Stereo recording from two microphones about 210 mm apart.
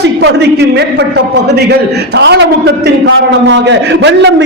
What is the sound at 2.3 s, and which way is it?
A man's voice, 55° right (ahead or behind).